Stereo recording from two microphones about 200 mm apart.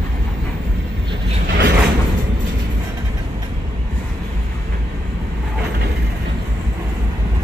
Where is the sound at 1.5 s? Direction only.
60° right (ahead or behind).